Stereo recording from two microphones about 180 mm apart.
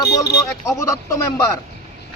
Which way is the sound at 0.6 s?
15° left (ahead or behind).